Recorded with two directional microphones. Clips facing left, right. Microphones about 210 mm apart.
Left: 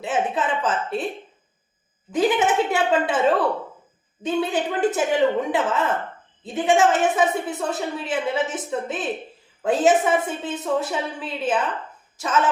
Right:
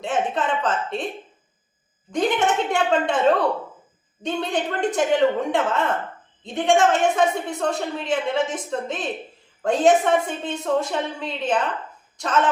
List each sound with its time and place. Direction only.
0.0 s a woman's voice: 5° left (ahead or behind)
2.1 s a woman's voice: 5° left (ahead or behind)
4.2 s a woman's voice: 5° left (ahead or behind)